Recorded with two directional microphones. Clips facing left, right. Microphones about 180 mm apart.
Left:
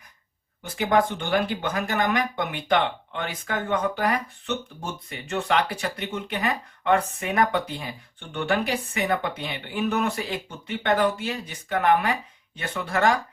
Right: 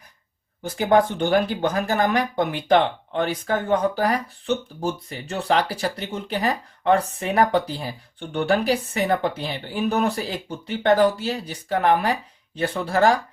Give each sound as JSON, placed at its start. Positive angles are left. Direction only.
{"t": 0.6, "sound": "speech", "side_deg": -35}